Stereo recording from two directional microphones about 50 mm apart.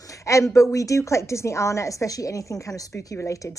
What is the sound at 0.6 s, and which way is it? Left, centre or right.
A woman's voice, left.